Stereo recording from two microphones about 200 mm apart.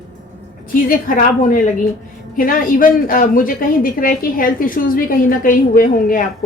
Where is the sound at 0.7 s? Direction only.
45° left (ahead or behind).